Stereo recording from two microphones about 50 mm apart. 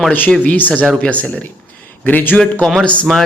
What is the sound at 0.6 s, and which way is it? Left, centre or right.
Speech, left.